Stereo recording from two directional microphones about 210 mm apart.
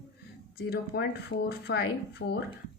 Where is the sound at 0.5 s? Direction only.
50° left (ahead or behind).